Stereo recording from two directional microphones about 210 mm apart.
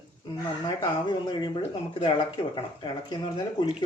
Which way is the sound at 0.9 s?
20° left (ahead or behind).